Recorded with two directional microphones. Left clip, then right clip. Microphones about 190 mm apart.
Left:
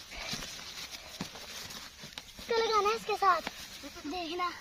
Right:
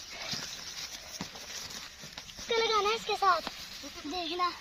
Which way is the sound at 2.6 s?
5° left (ahead or behind).